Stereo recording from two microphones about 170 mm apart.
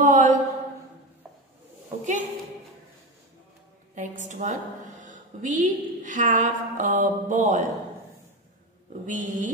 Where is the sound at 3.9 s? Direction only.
45° right (ahead or behind).